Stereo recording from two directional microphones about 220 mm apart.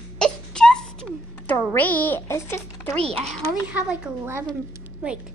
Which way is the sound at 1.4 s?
10° left (ahead or behind).